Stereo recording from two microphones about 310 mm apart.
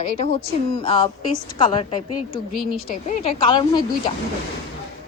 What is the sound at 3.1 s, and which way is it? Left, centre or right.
Speech, left.